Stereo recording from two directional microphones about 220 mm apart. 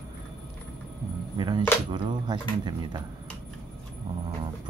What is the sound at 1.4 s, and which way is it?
Speech, 20° right (ahead or behind).